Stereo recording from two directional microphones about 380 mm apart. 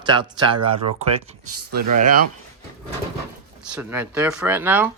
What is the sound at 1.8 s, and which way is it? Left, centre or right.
Speech, right.